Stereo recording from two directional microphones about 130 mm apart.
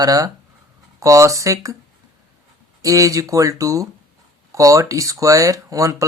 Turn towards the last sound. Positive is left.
turn(degrees=-25)  # may be behind; listen again after turning